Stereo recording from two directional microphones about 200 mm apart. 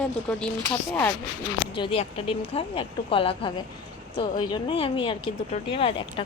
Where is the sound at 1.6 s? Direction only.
30° left (ahead or behind).